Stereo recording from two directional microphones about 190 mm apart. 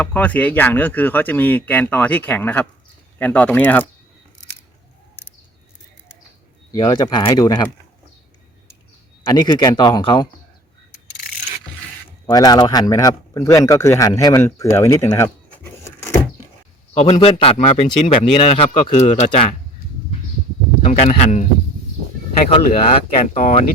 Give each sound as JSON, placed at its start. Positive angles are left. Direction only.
{"t": 0.0, "sound": "speech", "side_deg": 10}
{"t": 6.7, "sound": "speech", "side_deg": 20}
{"t": 9.3, "sound": "speech", "side_deg": 20}
{"t": 12.2, "sound": "speech", "side_deg": 20}
{"t": 16.9, "sound": "a man's voice", "side_deg": 35}
{"t": 20.8, "sound": "a man's voice", "side_deg": 30}
{"t": 22.6, "sound": "a man's voice", "side_deg": 30}